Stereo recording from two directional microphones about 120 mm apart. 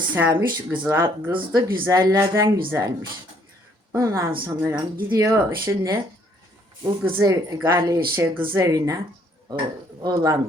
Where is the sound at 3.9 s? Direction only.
25° right (ahead or behind).